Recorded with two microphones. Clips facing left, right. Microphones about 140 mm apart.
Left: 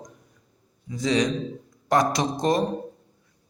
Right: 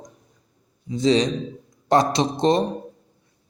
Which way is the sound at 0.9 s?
30° right (ahead or behind).